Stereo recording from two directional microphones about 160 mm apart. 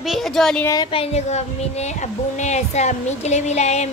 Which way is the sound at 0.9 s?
40° left (ahead or behind).